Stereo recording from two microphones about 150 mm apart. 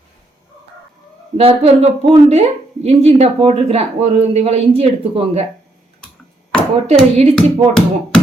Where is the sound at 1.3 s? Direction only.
40° right (ahead or behind).